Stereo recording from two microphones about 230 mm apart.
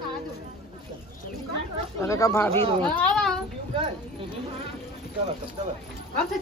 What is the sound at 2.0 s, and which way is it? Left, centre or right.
A child's voice, centre.